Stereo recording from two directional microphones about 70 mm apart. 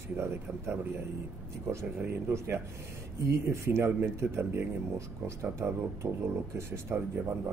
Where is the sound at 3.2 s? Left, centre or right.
Right.